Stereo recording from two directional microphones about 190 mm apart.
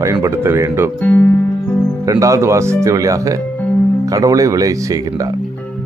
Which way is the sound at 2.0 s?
15° right (ahead or behind).